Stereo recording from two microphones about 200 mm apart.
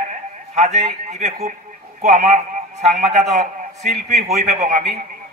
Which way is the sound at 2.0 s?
40° right (ahead or behind).